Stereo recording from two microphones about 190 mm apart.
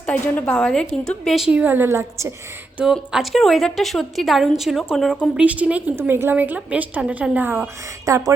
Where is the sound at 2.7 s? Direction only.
5° right (ahead or behind).